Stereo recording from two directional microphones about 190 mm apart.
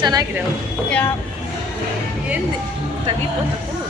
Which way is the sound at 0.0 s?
20° right (ahead or behind).